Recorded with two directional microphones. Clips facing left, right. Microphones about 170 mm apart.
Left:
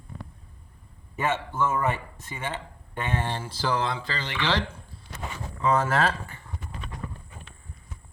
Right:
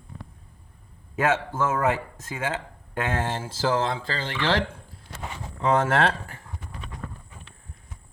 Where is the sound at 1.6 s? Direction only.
90° right.